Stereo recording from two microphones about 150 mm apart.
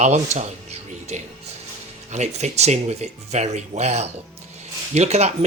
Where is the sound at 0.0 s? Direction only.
50° right (ahead or behind).